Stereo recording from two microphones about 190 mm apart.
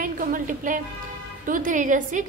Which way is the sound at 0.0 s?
45° right (ahead or behind).